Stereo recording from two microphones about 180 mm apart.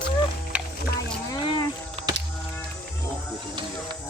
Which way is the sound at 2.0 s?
35° right (ahead or behind).